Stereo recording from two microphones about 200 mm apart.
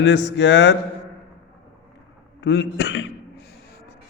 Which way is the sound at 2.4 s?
60° left (ahead or behind).